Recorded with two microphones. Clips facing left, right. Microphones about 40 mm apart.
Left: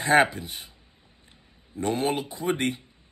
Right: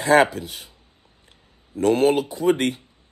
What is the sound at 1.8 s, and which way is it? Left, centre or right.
Speech, centre.